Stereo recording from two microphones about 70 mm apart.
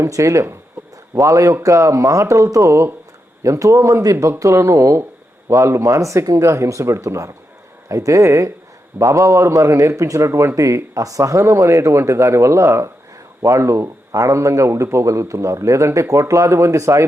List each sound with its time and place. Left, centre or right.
0.0 s a man's voice: right